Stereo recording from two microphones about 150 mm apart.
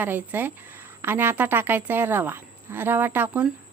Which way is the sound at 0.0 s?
10° right (ahead or behind).